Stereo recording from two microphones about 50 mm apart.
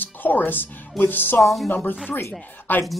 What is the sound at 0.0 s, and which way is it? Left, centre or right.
Speech, left.